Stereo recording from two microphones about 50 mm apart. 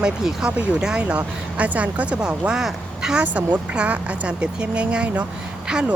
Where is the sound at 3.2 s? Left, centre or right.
Right.